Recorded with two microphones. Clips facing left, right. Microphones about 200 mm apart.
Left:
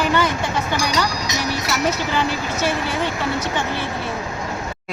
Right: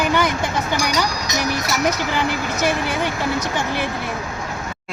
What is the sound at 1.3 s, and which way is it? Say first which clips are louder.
Speech: right 1 dB; 45° right (ahead or behind).